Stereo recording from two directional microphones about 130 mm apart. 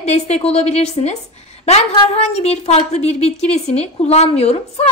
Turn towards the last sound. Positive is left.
turn(degrees=55)  # may be behind; listen again after turning